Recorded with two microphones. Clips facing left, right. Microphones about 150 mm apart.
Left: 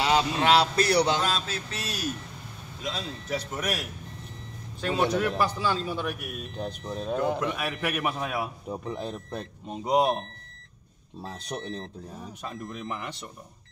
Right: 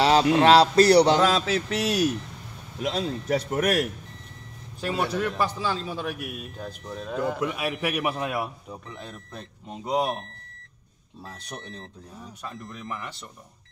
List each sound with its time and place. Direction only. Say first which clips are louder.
0.4 s a man's voice: right 6 dB; 35° right (ahead or behind)
1.1 s speech: right 7 dB; 85° right
2.8 s speech: right 7 dB; 60° right (ahead or behind)
4.8 s a man's voice: left 1 dB; 5° right (ahead or behind)
6.5 s speech: left 3 dB; 25° left (ahead or behind)
7.3 s a man's voice: right 2 dB; 10° right (ahead or behind)
8.6 s speech: left 7 dB; 30° left (ahead or behind)
11.2 s speech: left 5 dB; 30° left (ahead or behind)
12.8 s speech: right 1 dB; 25° left (ahead or behind)